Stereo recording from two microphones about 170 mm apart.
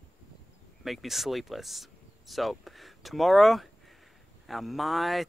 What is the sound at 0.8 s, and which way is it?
Speech, centre (ahead or behind).